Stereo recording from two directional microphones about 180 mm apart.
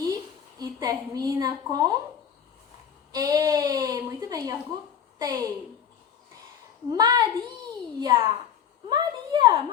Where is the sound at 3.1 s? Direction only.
20° right (ahead or behind).